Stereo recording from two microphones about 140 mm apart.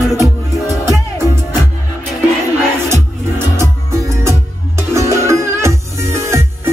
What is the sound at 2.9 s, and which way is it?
Music, 20° right (ahead or behind).